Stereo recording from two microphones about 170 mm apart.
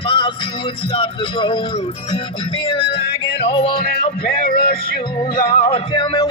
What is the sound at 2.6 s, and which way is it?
Music, 30° left (ahead or behind).